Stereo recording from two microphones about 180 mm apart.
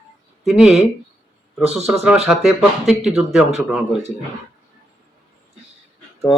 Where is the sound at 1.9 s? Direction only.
10° right (ahead or behind).